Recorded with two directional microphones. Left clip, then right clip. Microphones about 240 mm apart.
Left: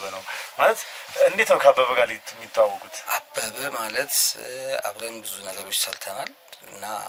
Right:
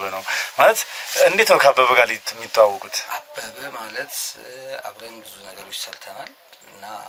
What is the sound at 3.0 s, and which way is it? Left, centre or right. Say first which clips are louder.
Speech: left 2 dB; left.